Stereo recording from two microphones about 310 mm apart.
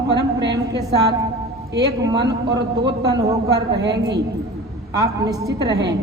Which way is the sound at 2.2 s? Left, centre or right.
Centre.